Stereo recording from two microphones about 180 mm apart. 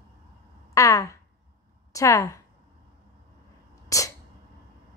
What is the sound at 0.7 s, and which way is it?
Speech, 15° left (ahead or behind).